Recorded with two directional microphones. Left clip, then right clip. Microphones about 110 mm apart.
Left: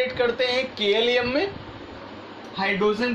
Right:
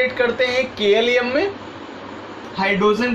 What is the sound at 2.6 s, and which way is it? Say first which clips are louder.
Speech: right 5 dB; 15° left (ahead or behind).